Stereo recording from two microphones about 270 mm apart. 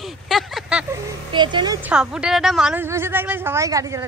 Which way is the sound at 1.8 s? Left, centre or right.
Centre.